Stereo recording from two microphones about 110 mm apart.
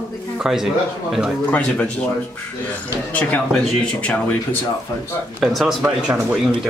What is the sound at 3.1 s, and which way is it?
Speech, 15° left (ahead or behind).